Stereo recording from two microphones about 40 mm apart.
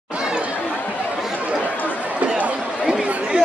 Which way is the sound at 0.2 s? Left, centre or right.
Right.